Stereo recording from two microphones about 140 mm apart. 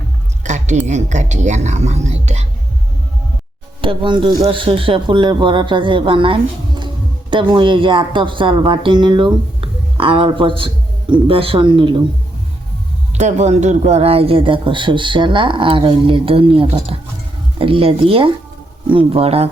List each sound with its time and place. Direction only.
0.4 s a woman's voice: 55° right (ahead or behind)
3.8 s speech: 35° right (ahead or behind)
13.1 s speech: 55° right (ahead or behind)